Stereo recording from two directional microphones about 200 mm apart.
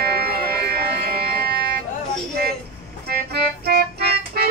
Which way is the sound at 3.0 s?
50° right (ahead or behind).